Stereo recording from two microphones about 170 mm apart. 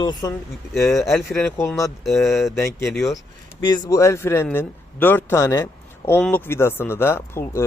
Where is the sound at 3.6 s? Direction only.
20° left (ahead or behind).